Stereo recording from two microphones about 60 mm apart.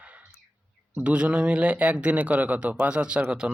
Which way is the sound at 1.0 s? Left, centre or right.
Centre.